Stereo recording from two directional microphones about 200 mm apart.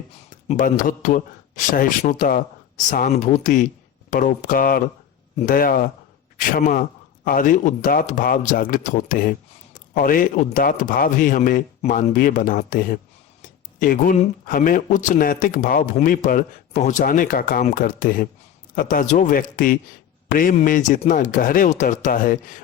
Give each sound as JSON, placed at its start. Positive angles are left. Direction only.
{"t": 0.4, "sound": "a man's voice", "side_deg": 40}